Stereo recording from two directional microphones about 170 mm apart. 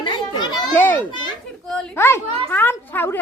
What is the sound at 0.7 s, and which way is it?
A woman's voice, 10° left (ahead or behind).